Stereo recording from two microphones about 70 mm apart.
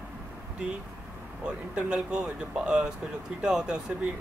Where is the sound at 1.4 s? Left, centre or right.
Centre.